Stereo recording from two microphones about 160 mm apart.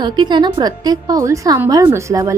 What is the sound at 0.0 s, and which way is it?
A woman's voice, 30° right (ahead or behind).